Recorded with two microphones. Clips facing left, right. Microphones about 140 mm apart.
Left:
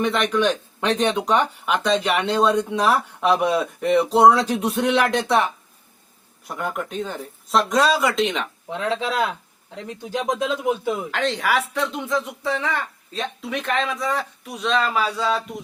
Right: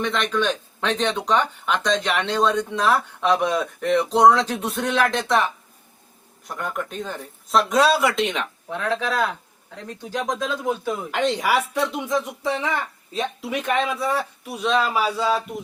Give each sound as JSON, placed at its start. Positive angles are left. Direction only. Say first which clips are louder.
{"t": 0.0, "sound": "speech", "louder": "left 3 dB", "side_deg": 10}
{"t": 6.5, "sound": "speech", "louder": "left 2 dB", "side_deg": 5}
{"t": 8.7, "sound": "speech", "louder": "even", "side_deg": 20}
{"t": 11.1, "sound": "speech", "louder": "right 3 dB", "side_deg": -10}